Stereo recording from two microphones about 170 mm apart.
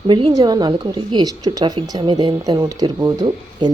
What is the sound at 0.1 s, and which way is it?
A woman's voice, 30° right (ahead or behind).